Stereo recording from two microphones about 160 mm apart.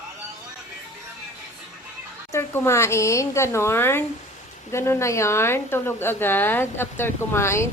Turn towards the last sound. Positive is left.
turn(degrees=15)  # may be behind; listen again after turning